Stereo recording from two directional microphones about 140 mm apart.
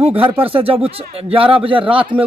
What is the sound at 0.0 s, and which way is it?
Speech, 40° right (ahead or behind).